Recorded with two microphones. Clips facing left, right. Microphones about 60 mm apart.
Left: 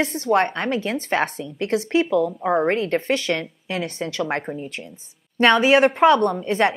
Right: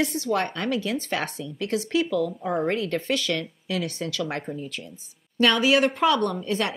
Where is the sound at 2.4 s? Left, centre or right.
Left.